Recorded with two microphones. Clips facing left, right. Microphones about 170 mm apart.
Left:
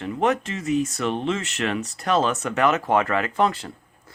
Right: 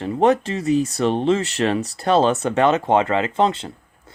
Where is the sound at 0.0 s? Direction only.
30° right (ahead or behind).